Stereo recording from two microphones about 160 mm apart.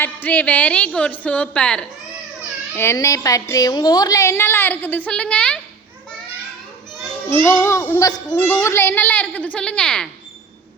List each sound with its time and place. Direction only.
0.0 s a child's voice: 10° left (ahead or behind)
7.3 s a child's voice: 15° left (ahead or behind)